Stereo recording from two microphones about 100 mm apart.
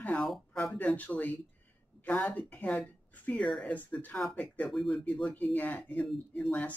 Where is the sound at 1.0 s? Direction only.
15° left (ahead or behind).